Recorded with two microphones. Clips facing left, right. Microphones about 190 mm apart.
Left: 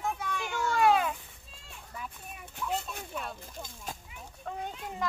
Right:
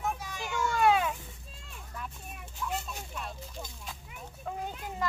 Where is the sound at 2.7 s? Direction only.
55° left (ahead or behind).